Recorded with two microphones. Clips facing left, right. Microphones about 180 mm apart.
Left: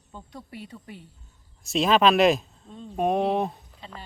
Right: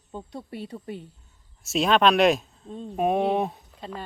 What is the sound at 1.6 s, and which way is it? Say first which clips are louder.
Speech: even; centre (ahead or behind).